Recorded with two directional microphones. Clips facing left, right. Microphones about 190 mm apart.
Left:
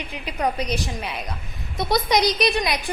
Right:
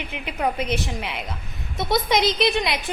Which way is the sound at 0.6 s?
25° right (ahead or behind).